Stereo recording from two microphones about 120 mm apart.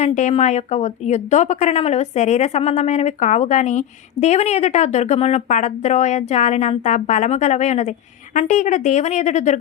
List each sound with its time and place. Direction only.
0.0 s speech: 75° left (ahead or behind)
8.4 s speech: 90° left